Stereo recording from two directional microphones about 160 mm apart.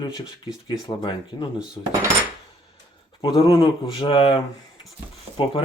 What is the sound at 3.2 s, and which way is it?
Speech, 35° left (ahead or behind).